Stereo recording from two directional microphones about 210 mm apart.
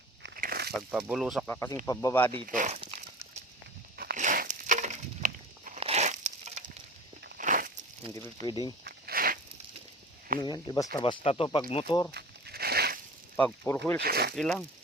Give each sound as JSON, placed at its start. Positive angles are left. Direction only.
{"t": 0.2, "sound": "a sound", "side_deg": -45}
{"t": 0.8, "sound": "speech", "side_deg": -5}
{"t": 1.5, "sound": "speech", "side_deg": 10}
{"t": 2.5, "sound": "speech", "side_deg": -35}
{"t": 3.9, "sound": "a sound", "side_deg": -45}
{"t": 8.4, "sound": "speech", "side_deg": 20}
{"t": 8.8, "sound": "walk", "side_deg": -45}
{"t": 10.4, "sound": "speech", "side_deg": 20}
{"t": 12.1, "sound": "a sound", "side_deg": -50}
{"t": 13.3, "sound": "speech", "side_deg": 5}
{"t": 14.0, "sound": "speech", "side_deg": -50}
{"t": 14.3, "sound": "speech", "side_deg": 0}